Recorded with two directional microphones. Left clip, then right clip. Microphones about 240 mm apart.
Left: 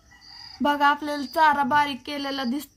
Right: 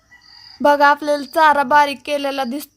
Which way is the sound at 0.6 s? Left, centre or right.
Right.